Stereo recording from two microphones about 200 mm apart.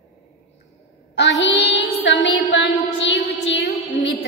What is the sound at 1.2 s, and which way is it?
Child singing, 65° left (ahead or behind).